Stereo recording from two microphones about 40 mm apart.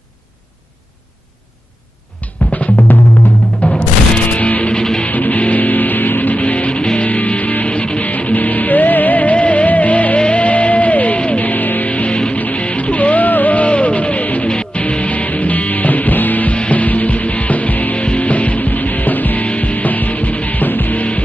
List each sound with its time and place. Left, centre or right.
2.2 s drum: left
3.6 s music: left
4.7 s music: left
5.0 s music: left
7.1 s music: left
8.1 s music: left
14.5 s music: left
14.8 s music: left
16.5 s music: left
19.4 s music: left